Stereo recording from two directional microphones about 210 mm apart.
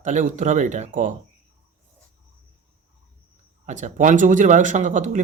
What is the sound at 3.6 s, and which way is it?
Speech, 35° right (ahead or behind).